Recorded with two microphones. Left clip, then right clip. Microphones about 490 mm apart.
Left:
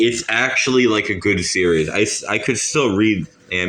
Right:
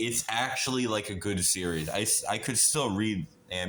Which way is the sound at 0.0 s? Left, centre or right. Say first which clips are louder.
Left 13 dB; right.